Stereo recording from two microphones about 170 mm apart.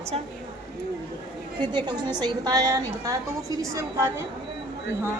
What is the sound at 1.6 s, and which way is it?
A woman's voice, 25° right (ahead or behind).